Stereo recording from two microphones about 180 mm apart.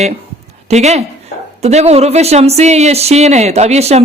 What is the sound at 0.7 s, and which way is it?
Speech, 40° right (ahead or behind).